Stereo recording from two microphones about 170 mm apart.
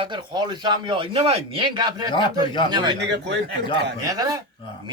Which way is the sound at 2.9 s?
90° right.